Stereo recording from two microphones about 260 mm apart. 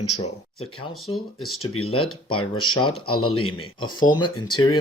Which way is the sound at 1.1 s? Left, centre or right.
Centre.